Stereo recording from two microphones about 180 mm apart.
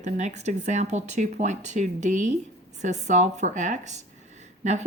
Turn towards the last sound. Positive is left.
turn(degrees=-40)  # may be behind; listen again after turning